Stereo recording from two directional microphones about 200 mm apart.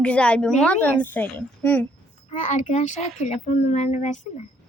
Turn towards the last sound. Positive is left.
turn(degrees=35)  # may be behind; listen again after turning